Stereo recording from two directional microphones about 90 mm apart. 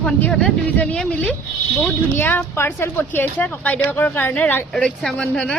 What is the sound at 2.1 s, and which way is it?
Speech, 25° left (ahead or behind).